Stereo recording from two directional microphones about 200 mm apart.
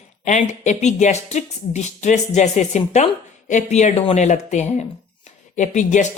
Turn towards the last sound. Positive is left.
turn(degrees=40)  # may be behind; listen again after turning